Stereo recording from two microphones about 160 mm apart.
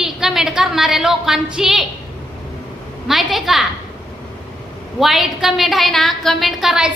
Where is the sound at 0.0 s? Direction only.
5° right (ahead or behind).